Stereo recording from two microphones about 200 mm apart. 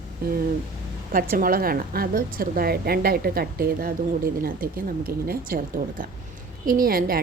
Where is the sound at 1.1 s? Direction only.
45° right (ahead or behind).